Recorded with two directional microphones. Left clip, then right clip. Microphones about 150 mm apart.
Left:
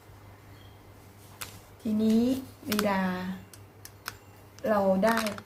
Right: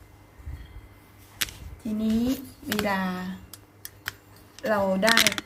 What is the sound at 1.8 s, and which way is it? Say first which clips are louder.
Speech: left 1 dB; 5° left (ahead or behind).